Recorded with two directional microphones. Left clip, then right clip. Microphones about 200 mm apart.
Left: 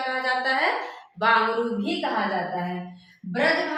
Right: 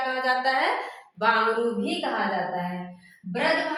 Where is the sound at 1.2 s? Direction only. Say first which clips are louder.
Left 2 dB; 5° right (ahead or behind).